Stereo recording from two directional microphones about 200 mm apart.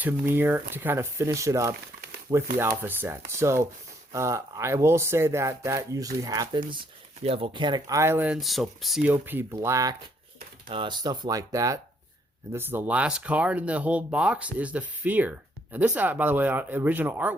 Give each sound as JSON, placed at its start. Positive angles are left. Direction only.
{"t": 0.0, "sound": "speech", "side_deg": -10}